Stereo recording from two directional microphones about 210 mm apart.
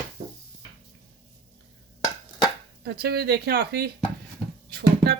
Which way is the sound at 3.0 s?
50° right (ahead or behind).